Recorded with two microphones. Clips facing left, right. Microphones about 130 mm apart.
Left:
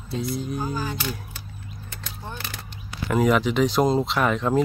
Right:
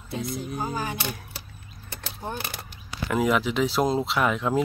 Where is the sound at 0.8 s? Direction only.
20° right (ahead or behind).